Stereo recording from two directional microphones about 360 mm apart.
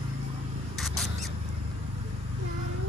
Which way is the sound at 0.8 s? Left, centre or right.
Centre.